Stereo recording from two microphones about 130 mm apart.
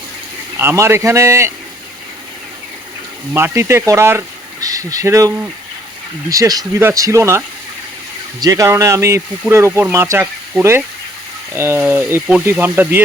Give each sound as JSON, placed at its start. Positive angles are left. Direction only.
{"t": 0.5, "sound": "speech", "side_deg": -20}
{"t": 3.3, "sound": "speech", "side_deg": -20}
{"t": 6.3, "sound": "speech", "side_deg": -25}